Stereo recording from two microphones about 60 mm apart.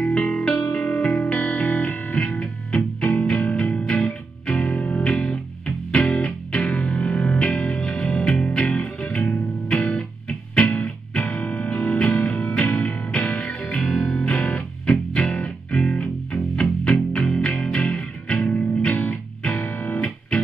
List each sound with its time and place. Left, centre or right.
0.0 s music: centre
4.6 s music: left
9.7 s music: centre
19.6 s music: left